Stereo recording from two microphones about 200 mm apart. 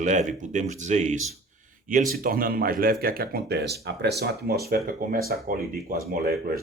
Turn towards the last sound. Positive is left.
turn(degrees=-50)  # may be behind; listen again after turning